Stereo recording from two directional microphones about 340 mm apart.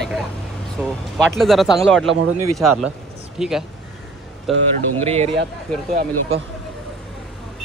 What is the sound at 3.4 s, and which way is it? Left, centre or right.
Speech, centre.